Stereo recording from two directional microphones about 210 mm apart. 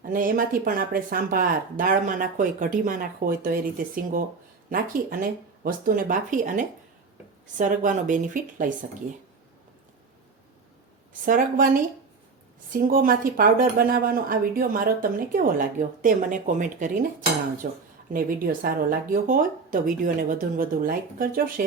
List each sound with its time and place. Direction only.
0.0 s speech: 40° right (ahead or behind)
11.3 s speech: 40° right (ahead or behind)